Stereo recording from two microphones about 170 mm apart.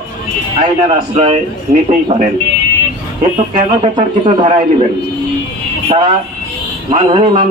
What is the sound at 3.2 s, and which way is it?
A man's voice, 30° right (ahead or behind).